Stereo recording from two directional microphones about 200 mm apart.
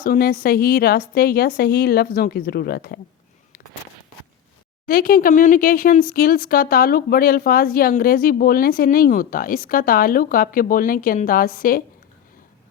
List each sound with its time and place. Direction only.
0.0 s speech: 45° left (ahead or behind)
4.9 s speech: 45° left (ahead or behind)